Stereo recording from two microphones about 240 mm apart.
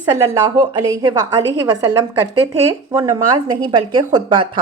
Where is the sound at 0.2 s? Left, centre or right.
Centre.